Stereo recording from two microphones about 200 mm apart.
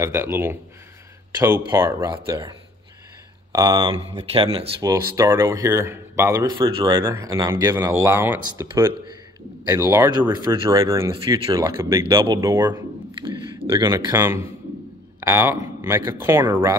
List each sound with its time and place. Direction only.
0.0 s speech: 15° right (ahead or behind)
1.7 s speech: 15° right (ahead or behind)
3.5 s speech: 20° right (ahead or behind)
4.8 s speech: 15° right (ahead or behind)